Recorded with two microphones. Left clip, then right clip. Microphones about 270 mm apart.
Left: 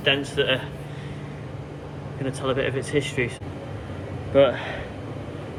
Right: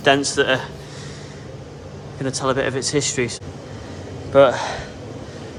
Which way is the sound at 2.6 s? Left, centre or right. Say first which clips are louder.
Right 4 dB; right.